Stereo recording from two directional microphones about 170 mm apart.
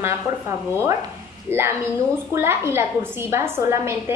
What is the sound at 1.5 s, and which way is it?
A woman's voice, 15° right (ahead or behind).